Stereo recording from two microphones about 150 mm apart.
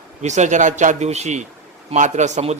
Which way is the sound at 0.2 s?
50° right (ahead or behind).